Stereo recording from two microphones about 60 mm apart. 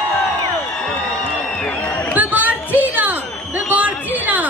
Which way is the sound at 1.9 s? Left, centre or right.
Left.